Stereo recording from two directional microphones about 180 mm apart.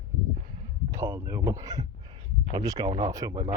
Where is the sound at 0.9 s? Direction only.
15° right (ahead or behind).